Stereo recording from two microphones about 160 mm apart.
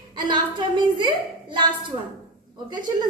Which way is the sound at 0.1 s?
30° right (ahead or behind).